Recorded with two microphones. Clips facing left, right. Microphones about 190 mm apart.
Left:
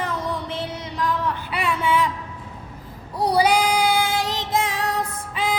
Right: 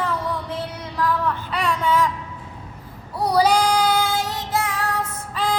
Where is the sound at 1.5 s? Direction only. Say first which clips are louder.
Right 1 dB; 5° left (ahead or behind).